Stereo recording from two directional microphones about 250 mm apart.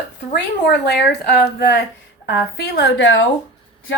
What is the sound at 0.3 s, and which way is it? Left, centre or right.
Speech, left.